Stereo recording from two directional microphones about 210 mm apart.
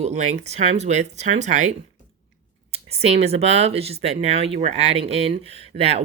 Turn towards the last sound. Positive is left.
turn(degrees=-30)  # may be behind; listen again after turning